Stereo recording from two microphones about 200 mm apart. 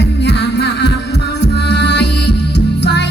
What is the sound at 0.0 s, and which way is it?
Music, 60° left (ahead or behind).